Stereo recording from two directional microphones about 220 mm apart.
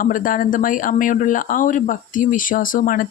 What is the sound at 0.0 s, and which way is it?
Speech, 40° left (ahead or behind).